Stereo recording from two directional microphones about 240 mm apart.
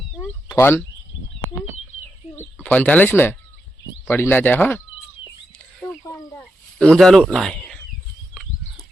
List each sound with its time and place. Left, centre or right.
0.4 s speech: centre
2.3 s speech: centre
6.3 s a sound: centre